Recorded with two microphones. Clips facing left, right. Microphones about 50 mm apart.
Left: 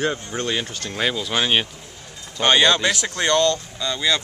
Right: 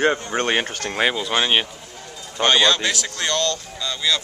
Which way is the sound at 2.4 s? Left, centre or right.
Centre.